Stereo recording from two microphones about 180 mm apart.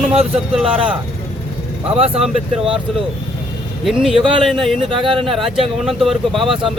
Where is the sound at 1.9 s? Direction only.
30° right (ahead or behind).